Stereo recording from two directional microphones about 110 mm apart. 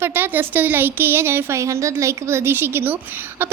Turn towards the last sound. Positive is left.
turn(degrees=-15)  # may be behind; listen again after turning